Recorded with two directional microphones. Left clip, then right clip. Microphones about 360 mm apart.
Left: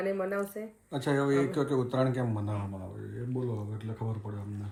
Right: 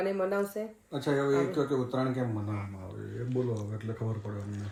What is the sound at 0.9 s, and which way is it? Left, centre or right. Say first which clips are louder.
A man's voice: even; left.